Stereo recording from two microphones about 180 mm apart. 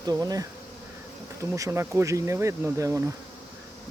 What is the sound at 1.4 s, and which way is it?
Speech, 15° right (ahead or behind).